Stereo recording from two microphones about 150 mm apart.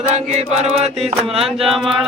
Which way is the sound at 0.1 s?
50° right (ahead or behind).